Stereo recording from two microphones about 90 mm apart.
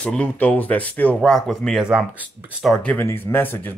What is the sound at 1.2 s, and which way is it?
Speech, 5° left (ahead or behind).